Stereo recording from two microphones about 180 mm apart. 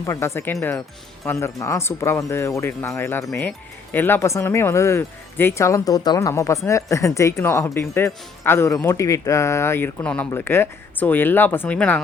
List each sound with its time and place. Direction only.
0.0 s speech: 15° left (ahead or behind)